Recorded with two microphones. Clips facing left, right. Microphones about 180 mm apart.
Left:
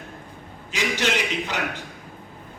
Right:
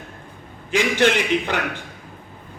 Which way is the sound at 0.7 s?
55° right (ahead or behind).